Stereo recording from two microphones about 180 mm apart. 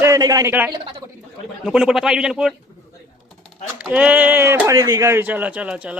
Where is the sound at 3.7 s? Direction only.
5° right (ahead or behind).